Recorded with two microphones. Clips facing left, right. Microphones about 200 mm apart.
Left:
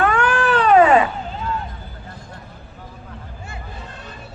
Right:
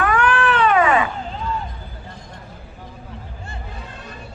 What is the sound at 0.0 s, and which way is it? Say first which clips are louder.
Cat: left 1 dB; 25° left (ahead or behind).